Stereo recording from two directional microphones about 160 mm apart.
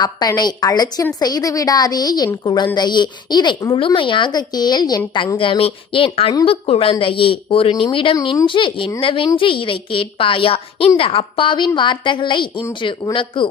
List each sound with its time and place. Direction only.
0.0 s a woman's voice: 25° left (ahead or behind)